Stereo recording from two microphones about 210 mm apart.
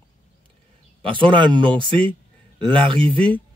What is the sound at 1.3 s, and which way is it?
Speech, 20° right (ahead or behind).